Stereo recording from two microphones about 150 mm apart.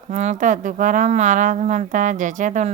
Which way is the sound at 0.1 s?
50° right (ahead or behind).